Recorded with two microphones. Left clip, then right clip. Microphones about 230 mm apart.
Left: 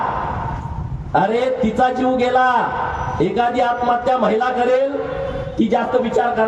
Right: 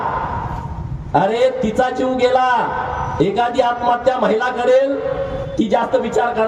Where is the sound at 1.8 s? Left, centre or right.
Right.